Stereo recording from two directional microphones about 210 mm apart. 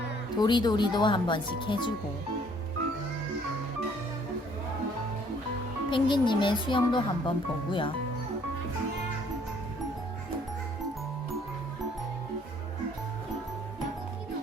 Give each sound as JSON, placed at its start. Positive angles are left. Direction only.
{"t": 0.3, "sound": "speech", "side_deg": 20}
{"t": 5.9, "sound": "speech", "side_deg": 20}